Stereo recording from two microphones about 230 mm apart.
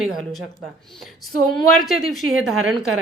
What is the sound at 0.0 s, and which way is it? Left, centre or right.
A woman's voice, centre.